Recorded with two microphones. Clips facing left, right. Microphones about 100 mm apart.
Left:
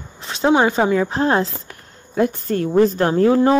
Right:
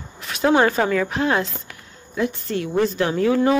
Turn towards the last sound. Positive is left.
turn(degrees=35)  # may be behind; listen again after turning